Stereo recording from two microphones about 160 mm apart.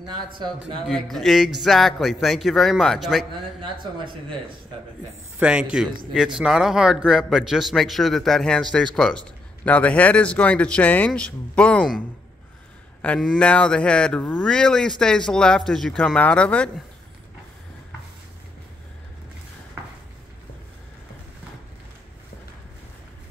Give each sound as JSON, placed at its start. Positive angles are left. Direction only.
{"t": 0.0, "sound": "speech", "side_deg": -30}
{"t": 0.8, "sound": "speech", "side_deg": 0}
{"t": 3.7, "sound": "speech", "side_deg": -30}
{"t": 5.4, "sound": "a man's voice", "side_deg": -5}
{"t": 13.0, "sound": "speech", "side_deg": 5}